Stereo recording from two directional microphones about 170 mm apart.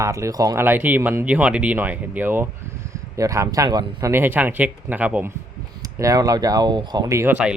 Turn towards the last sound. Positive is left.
turn(degrees=-10)  # may be behind; listen again after turning